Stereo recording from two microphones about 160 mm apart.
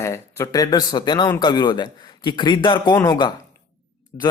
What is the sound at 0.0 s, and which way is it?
A man's voice, 15° left (ahead or behind).